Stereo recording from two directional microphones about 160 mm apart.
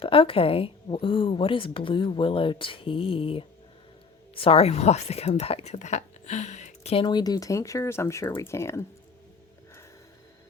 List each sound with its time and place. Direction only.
0.0 s speech: 35° left (ahead or behind); by 8.8 s 15° left (ahead or behind)